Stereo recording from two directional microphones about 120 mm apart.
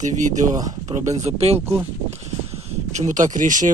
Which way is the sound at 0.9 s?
70° right (ahead or behind).